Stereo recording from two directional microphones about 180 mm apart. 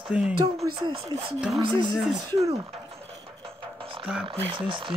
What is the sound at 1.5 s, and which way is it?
Speech, 25° right (ahead or behind).